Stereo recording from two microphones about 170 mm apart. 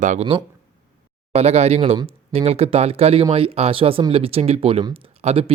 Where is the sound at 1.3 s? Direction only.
40° right (ahead or behind).